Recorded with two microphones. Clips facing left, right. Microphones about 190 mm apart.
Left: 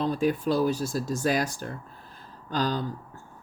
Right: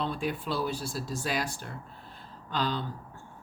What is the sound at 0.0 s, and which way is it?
Speech, 40° left (ahead or behind).